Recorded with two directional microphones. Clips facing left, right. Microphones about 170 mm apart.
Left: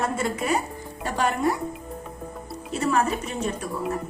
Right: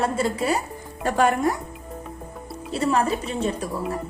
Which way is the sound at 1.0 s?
45° right (ahead or behind).